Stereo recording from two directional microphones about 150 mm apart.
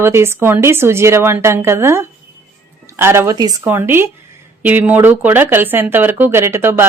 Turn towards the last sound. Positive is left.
turn(degrees=-15)  # may be behind; listen again after turning